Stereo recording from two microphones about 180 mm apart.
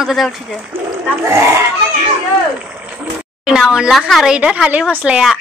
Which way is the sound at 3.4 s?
5° right (ahead or behind).